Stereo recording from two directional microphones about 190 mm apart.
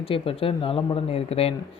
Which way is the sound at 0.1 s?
30° left (ahead or behind).